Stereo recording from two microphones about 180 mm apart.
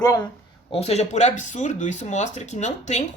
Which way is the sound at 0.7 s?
35° left (ahead or behind).